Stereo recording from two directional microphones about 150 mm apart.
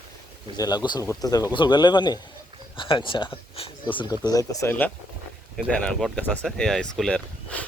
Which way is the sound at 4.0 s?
25° left (ahead or behind).